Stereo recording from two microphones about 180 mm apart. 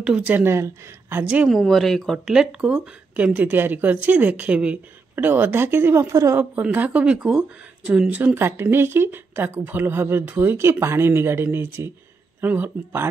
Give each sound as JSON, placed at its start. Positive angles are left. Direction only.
{"t": 0.0, "sound": "a woman's voice", "side_deg": -5}